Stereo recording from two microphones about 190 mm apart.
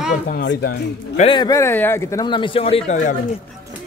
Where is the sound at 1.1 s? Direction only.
35° left (ahead or behind).